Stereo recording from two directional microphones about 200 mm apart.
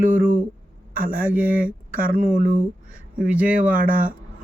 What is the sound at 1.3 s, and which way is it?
Speech, 10° right (ahead or behind).